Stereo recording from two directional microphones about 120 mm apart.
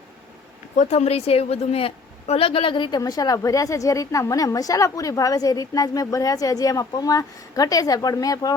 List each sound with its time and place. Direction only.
0.8 s a woman's voice: 65° left (ahead or behind); by 8.5 s 30° left (ahead or behind)